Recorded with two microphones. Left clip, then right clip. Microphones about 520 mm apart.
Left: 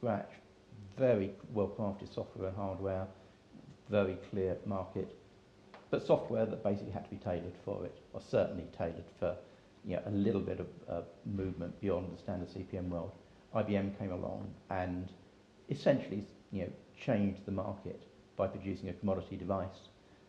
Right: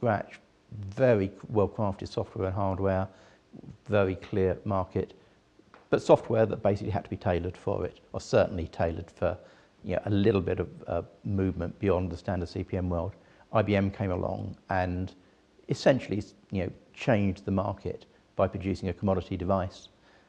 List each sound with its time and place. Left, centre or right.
0.0 s speech: right